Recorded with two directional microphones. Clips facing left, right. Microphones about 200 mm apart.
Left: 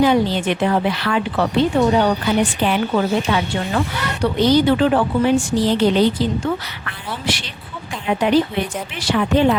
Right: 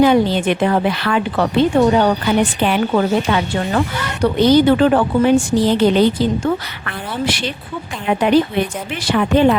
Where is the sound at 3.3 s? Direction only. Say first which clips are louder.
Right 2 dB; 55° right (ahead or behind).